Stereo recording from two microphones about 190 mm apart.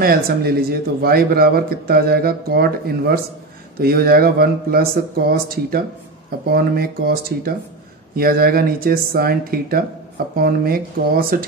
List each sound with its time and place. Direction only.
0.0 s a man's voice: 55° right (ahead or behind)